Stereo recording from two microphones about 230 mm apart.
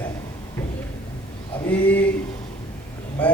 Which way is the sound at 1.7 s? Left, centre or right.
Centre.